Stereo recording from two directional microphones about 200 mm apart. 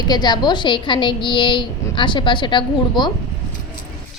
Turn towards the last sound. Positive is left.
turn(degrees=25)  # may be behind; listen again after turning